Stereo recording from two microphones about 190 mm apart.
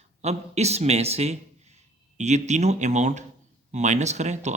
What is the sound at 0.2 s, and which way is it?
Speech, 35° right (ahead or behind).